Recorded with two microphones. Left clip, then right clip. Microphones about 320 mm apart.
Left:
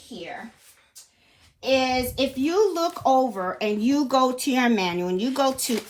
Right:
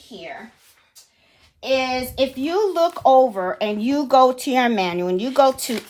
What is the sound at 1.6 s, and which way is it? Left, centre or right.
A woman's voice, right.